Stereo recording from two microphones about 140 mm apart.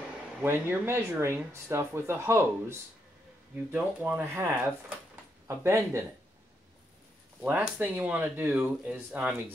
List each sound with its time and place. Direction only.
0.4 s speech: 15° right (ahead or behind)
7.4 s speech: 10° right (ahead or behind)